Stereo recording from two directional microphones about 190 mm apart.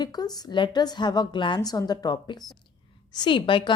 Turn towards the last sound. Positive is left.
turn(degrees=25)  # may be behind; listen again after turning